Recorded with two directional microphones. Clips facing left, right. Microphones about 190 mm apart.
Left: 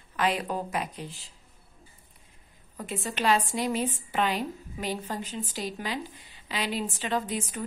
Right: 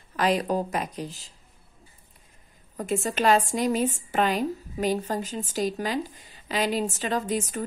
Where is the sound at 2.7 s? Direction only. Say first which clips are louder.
Right 7 dB; 45° right (ahead or behind).